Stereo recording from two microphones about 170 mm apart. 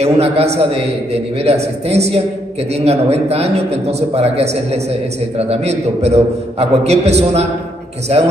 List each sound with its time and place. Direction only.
0.0 s a man's voice: 40° right (ahead or behind)